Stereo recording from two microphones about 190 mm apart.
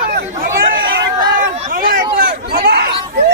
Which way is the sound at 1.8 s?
45° right (ahead or behind).